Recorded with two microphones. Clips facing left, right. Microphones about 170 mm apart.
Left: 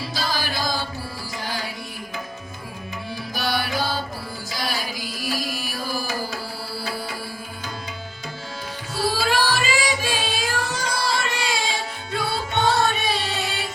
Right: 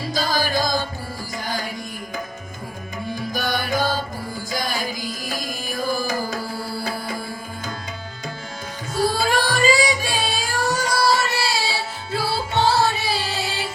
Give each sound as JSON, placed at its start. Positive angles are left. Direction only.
{"t": 0.0, "sound": "music", "side_deg": -45}
{"t": 3.2, "sound": "music", "side_deg": -45}
{"t": 9.0, "sound": "music", "side_deg": -45}